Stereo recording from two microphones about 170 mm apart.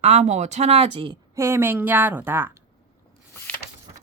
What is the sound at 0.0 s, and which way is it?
Speech, 40° right (ahead or behind).